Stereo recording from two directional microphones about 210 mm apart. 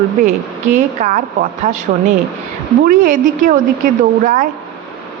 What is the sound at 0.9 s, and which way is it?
Speech, 35° right (ahead or behind).